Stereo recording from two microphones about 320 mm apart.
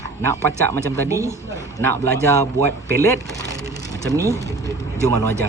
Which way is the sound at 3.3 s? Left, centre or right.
Centre.